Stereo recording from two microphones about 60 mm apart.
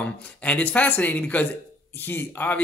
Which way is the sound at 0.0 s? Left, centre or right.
Left.